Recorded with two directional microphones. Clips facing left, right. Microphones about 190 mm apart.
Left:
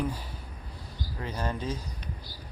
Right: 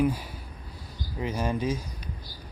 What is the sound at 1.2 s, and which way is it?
Speech, 15° right (ahead or behind).